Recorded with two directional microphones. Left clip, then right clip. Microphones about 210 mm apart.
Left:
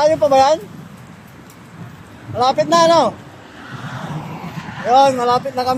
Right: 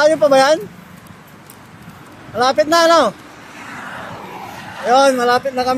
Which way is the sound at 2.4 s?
20° right (ahead or behind).